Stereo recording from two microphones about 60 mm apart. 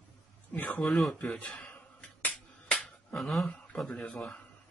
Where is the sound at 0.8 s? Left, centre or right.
Centre.